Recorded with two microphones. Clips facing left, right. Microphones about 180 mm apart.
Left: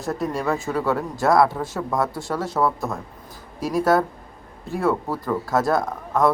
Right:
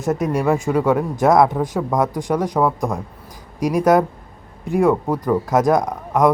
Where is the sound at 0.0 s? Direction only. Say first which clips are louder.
Right 6 dB; 20° right (ahead or behind).